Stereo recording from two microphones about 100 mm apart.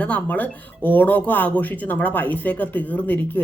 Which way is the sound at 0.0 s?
15° left (ahead or behind).